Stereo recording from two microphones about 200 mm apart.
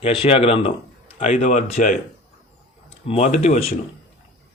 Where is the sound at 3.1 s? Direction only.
30° left (ahead or behind).